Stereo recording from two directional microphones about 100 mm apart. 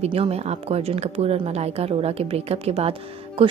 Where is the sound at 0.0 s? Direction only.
90° right.